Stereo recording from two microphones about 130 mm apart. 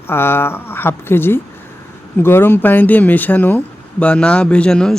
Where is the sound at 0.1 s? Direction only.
15° left (ahead or behind).